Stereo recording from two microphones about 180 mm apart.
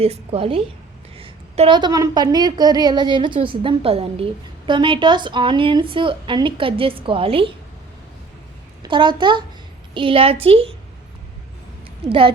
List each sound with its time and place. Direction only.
0.0 s a woman's voice: 35° right (ahead or behind)
8.8 s a child's voice: 25° right (ahead or behind)
12.0 s a woman's voice: 30° right (ahead or behind)